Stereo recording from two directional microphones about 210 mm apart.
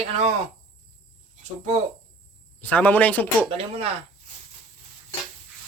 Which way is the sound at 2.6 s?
10° left (ahead or behind).